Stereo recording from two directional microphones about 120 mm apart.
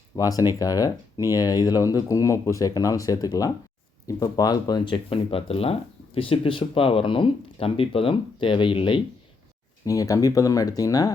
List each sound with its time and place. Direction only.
0.2 s speech: 30° left (ahead or behind)
5.0 s speech: 55° left (ahead or behind)
9.8 s speech: 30° left (ahead or behind)